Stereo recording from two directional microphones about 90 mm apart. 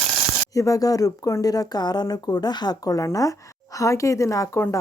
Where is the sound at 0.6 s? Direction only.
40° left (ahead or behind).